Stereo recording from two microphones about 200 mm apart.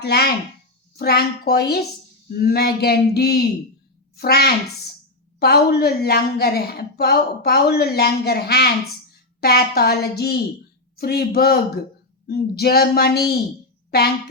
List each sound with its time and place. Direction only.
0.0 s a woman's voice: 55° left (ahead or behind)